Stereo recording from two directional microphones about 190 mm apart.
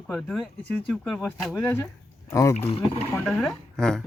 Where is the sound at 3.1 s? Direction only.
5° left (ahead or behind).